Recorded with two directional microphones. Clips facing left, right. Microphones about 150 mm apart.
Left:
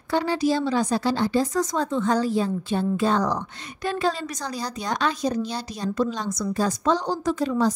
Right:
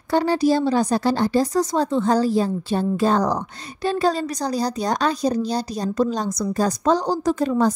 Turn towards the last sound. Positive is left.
turn(degrees=-50)  # may be behind; listen again after turning